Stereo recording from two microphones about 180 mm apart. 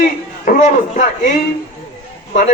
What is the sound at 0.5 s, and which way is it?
Speech, 50° left (ahead or behind).